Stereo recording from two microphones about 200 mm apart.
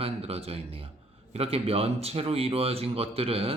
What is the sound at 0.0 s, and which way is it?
Speech, 30° right (ahead or behind).